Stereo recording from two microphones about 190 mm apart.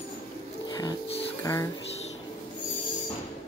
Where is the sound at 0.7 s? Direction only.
20° left (ahead or behind).